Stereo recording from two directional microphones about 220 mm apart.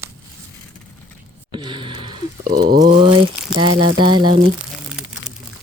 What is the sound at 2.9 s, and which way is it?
Crumpling, 25° right (ahead or behind).